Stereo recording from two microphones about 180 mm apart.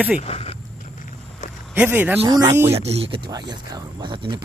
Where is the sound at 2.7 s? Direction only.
35° right (ahead or behind).